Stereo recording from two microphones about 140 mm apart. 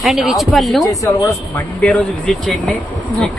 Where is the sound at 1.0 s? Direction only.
20° left (ahead or behind).